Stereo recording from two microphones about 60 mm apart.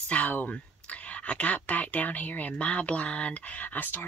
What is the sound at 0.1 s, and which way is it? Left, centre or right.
Speech, left.